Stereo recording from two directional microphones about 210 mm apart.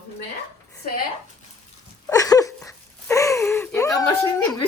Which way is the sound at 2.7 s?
15° left (ahead or behind).